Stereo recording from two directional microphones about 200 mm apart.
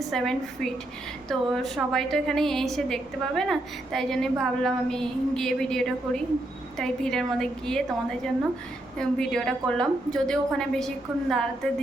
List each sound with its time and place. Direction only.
0.1 s a woman's voice: centre (ahead or behind)
9.0 s a woman's voice: 5° left (ahead or behind)